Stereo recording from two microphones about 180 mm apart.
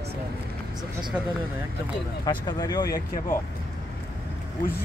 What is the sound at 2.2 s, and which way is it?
Speech, 25° left (ahead or behind).